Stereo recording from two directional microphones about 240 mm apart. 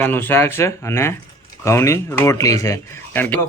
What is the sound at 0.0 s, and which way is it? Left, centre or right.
Speech, centre.